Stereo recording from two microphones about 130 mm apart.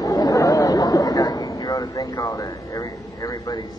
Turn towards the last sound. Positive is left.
turn(degrees=25)  # may be behind; listen again after turning